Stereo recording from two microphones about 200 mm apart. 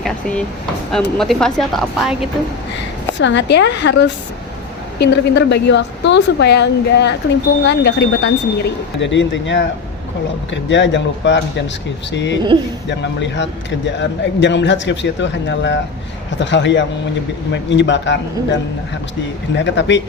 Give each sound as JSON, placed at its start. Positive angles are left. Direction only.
{"t": 0.0, "sound": "drawer open or close", "side_deg": 5}
{"t": 0.9, "sound": "speech", "side_deg": 0}
{"t": 3.2, "sound": "speech", "side_deg": 65}
{"t": 19.5, "sound": "speech", "side_deg": 60}